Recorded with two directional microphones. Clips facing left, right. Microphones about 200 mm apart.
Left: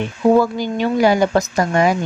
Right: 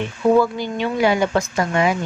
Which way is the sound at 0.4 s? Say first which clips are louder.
Left 2 dB; 40° left (ahead or behind).